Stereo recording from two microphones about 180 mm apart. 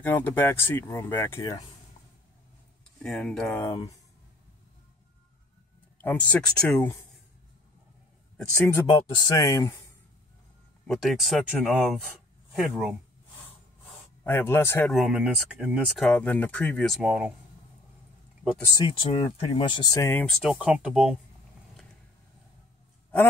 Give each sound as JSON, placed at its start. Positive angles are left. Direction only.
{"t": 0.0, "sound": "speech", "side_deg": 10}
{"t": 3.0, "sound": "speech", "side_deg": 5}
{"t": 5.9, "sound": "speech", "side_deg": 10}
{"t": 8.4, "sound": "speech", "side_deg": 10}
{"t": 10.9, "sound": "speech", "side_deg": 0}
{"t": 14.2, "sound": "speech", "side_deg": 10}
{"t": 14.9, "sound": "speech", "side_deg": 0}
{"t": 18.6, "sound": "speech", "side_deg": 20}
{"t": 20.2, "sound": "speech", "side_deg": 0}